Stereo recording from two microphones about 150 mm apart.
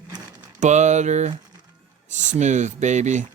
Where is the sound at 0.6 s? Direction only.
50° right (ahead or behind).